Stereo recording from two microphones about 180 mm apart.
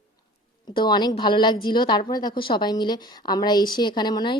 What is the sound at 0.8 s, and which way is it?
A woman's voice, 25° left (ahead or behind).